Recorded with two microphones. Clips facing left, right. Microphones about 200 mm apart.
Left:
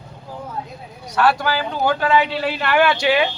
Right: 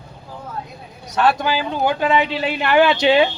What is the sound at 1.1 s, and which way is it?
Speech, 20° right (ahead or behind).